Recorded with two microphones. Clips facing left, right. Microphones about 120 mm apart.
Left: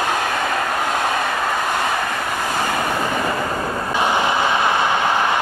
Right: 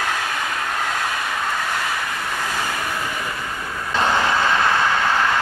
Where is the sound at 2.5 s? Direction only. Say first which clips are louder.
Left 5 dB; 50° left (ahead or behind).